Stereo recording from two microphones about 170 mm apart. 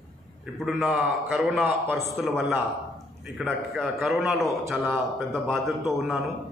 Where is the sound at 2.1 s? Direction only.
Centre (ahead or behind).